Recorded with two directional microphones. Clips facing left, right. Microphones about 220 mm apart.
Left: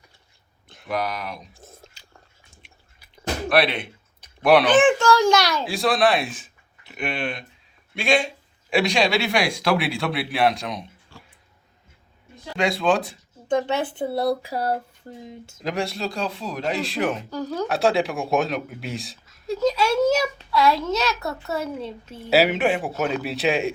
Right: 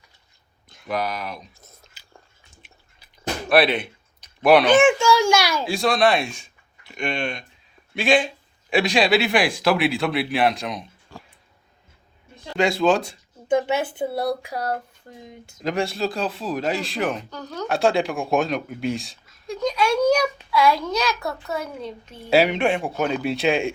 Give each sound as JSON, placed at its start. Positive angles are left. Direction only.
{"t": 0.9, "sound": "speech", "side_deg": 0}
{"t": 1.5, "sound": "chewing", "side_deg": 30}
{"t": 3.5, "sound": "speech", "side_deg": -5}
{"t": 4.7, "sound": "a sound", "side_deg": -10}
{"t": 5.2, "sound": "a child's voice", "side_deg": 20}
{"t": 5.6, "sound": "speech", "side_deg": 0}
{"t": 12.5, "sound": "speech", "side_deg": 0}
{"t": 14.5, "sound": "a child's voice", "side_deg": 30}
{"t": 15.6, "sound": "speech", "side_deg": 0}